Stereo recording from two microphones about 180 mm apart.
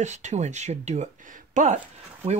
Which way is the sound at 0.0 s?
40° right (ahead or behind).